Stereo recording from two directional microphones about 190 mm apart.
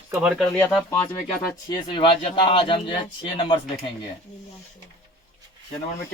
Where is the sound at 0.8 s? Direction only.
15° left (ahead or behind).